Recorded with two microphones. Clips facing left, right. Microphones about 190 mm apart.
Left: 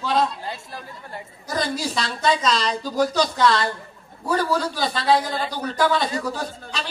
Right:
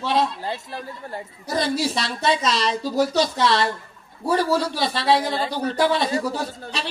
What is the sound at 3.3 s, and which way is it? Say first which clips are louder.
Speech: left 1 dB; 30° right (ahead or behind).